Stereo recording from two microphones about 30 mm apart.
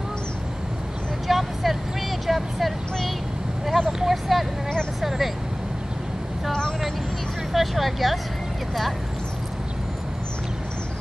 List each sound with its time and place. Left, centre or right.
1.2 s vehicle: centre
7.5 s vehicle: centre